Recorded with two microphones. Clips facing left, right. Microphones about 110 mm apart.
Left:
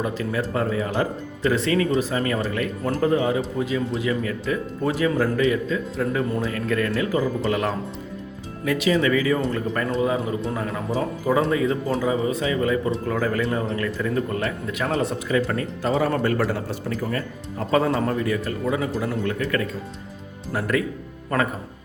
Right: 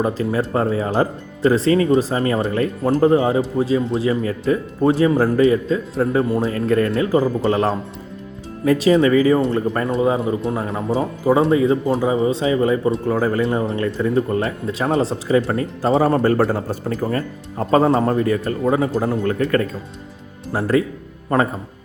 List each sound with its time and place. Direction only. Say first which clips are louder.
0.0 s speech: right 5 dB; 35° right (ahead or behind)